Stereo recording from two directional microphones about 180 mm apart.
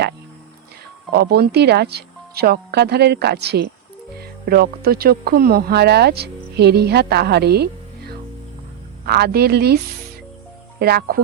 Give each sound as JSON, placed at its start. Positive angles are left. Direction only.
{"t": 1.1, "sound": "speech", "side_deg": -60}
{"t": 10.8, "sound": "speech", "side_deg": -60}